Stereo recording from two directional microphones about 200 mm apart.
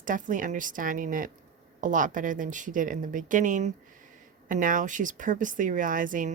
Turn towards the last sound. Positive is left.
turn(degrees=-40)  # may be behind; listen again after turning